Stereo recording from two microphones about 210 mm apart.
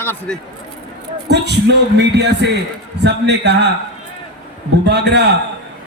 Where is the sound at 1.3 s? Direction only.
55° right (ahead or behind).